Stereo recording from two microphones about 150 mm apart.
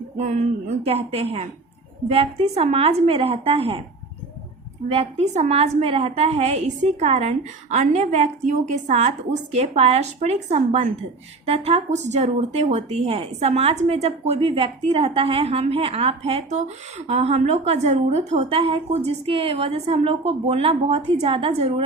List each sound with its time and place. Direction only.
0.2 s a woman's voice: 50° right (ahead or behind)
4.9 s a woman's voice: 45° right (ahead or behind)